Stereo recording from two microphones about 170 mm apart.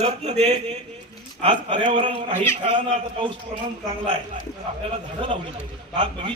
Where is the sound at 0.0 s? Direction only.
40° right (ahead or behind).